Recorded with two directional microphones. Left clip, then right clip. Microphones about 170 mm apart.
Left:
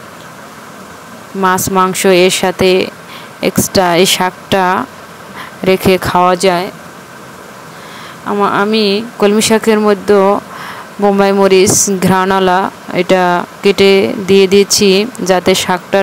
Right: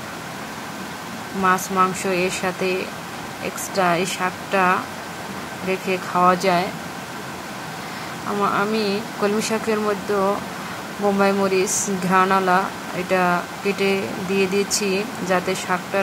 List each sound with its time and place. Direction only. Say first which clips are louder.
1.4 s speech: left 7 dB; 45° left (ahead or behind)
8.4 s speech: left 9 dB; 40° left (ahead or behind)